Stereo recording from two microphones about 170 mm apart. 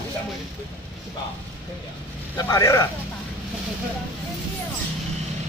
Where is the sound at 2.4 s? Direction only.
20° left (ahead or behind).